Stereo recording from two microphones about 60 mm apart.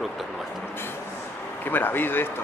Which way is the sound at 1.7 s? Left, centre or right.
Left.